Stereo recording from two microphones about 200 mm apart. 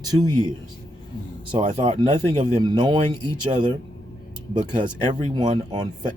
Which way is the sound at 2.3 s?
20° right (ahead or behind).